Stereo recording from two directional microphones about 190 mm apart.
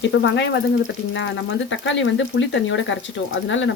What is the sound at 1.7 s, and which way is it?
Speech, 75° left (ahead or behind).